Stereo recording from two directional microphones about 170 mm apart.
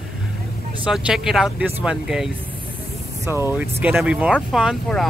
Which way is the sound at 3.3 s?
15° right (ahead or behind).